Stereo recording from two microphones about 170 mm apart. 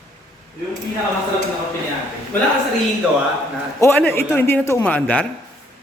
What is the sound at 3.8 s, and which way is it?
A man's voice, 10° left (ahead or behind).